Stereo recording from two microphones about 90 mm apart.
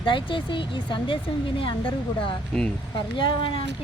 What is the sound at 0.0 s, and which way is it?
Speech, 70° left (ahead or behind).